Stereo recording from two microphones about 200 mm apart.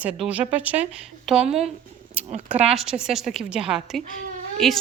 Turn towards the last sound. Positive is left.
turn(degrees=0)  # may be behind; listen again after turning